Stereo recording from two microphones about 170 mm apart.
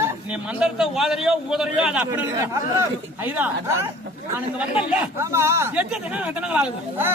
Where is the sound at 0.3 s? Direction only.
5° right (ahead or behind).